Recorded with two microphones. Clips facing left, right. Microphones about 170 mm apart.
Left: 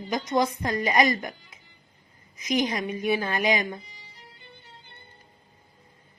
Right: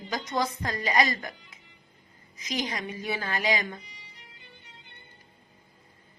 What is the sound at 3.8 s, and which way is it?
Music, 35° left (ahead or behind).